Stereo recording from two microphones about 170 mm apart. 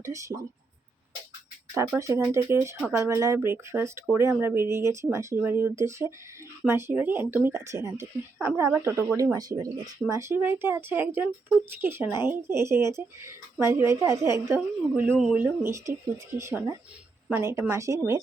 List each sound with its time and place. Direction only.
0.0 s speech: 15° right (ahead or behind)
2.0 s speech: 15° right (ahead or behind)